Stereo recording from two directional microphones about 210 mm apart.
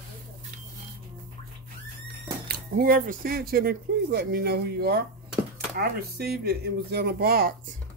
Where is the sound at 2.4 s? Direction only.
45° right (ahead or behind).